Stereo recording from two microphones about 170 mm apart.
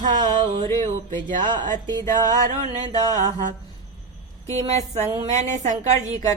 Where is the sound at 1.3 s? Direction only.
50° right (ahead or behind).